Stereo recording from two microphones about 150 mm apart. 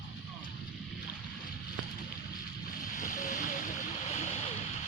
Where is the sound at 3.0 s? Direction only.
60° left (ahead or behind).